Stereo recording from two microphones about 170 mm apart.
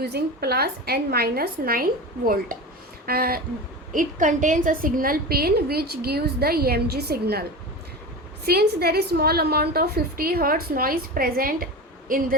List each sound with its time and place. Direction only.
0.0 s a woman's voice: 70° right (ahead or behind)
3.9 s a woman's voice: 50° right (ahead or behind); by 7.4 s 65° right (ahead or behind)
8.4 s a woman's voice: 70° right (ahead or behind)